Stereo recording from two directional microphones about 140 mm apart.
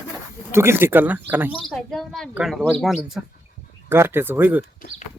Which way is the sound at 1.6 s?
Centre (ahead or behind).